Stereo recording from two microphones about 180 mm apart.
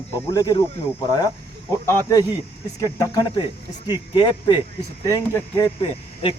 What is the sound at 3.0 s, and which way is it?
Speech, 20° left (ahead or behind).